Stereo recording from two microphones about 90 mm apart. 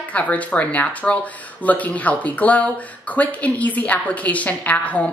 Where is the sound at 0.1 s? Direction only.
15° left (ahead or behind).